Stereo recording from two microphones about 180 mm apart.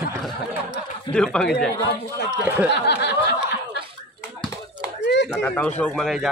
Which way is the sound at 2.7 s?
65° left (ahead or behind).